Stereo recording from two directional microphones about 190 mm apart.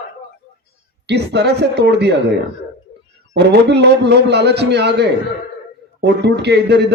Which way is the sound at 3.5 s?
60° right (ahead or behind).